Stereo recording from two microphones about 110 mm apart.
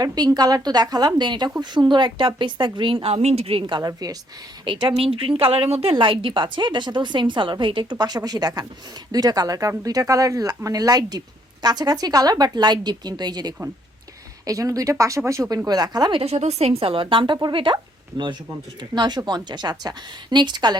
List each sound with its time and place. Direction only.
0.0 s speech: 35° right (ahead or behind)
3.8 s speech: 35° right (ahead or behind)
4.6 s speech: 45° right (ahead or behind)
16.1 s speech: 70° right (ahead or behind); by 17.7 s 50° right (ahead or behind)
18.8 s speech: 40° right (ahead or behind)